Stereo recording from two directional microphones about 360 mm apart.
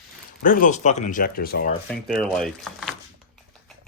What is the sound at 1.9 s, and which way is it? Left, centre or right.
Speech, centre.